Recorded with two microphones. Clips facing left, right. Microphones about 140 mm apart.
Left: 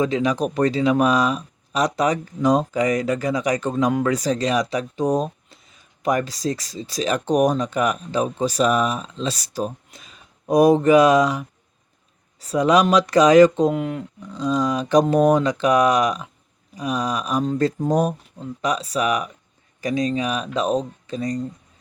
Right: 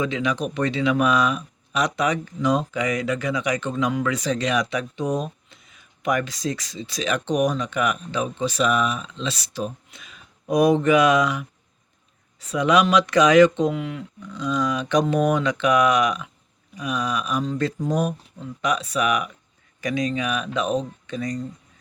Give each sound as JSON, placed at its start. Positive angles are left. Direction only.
{"t": 0.0, "sound": "speech", "side_deg": 40}